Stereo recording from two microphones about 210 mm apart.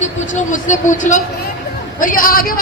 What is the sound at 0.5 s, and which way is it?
A man's voice, 35° left (ahead or behind).